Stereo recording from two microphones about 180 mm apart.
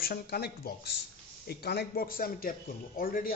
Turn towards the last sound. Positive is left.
turn(degrees=55)  # may be behind; listen again after turning